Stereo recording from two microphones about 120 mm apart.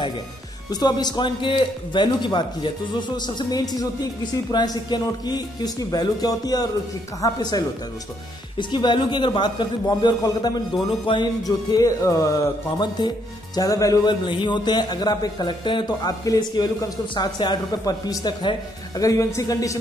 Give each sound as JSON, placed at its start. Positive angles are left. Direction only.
{"t": 0.7, "sound": "a man's voice", "side_deg": 35}
{"t": 11.1, "sound": "speech", "side_deg": 45}
{"t": 11.4, "sound": "speech", "side_deg": 30}
{"t": 12.7, "sound": "a man's voice", "side_deg": 35}
{"t": 14.2, "sound": "a man's voice", "side_deg": 40}